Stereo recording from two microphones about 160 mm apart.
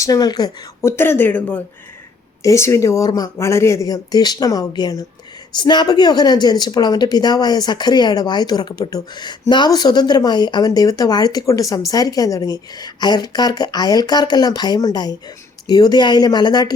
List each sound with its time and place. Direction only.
0.0 s a woman's voice: 25° left (ahead or behind)